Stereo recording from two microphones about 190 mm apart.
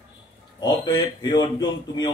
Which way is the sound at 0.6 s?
20° left (ahead or behind).